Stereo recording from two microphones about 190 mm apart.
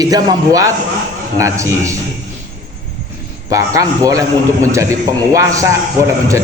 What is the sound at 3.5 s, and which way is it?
A man's voice, 20° right (ahead or behind).